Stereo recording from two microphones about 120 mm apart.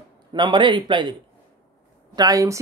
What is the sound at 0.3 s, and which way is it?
Speech, 40° right (ahead or behind).